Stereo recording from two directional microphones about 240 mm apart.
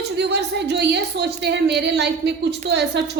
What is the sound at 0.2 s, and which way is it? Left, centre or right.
A woman's voice, right.